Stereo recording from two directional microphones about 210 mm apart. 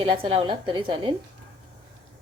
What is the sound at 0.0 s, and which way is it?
A woman's voice, 25° right (ahead or behind).